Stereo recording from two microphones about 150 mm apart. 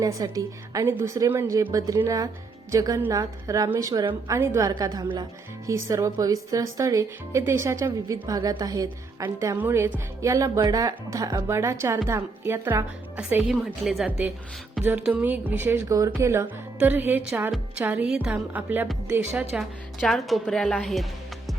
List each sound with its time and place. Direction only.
0.0 s speech: 25° right (ahead or behind)
13.8 s speech: centre (ahead or behind)
20.0 s speech: centre (ahead or behind)